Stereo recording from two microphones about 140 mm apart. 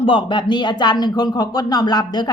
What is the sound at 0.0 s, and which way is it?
Speech, 35° left (ahead or behind).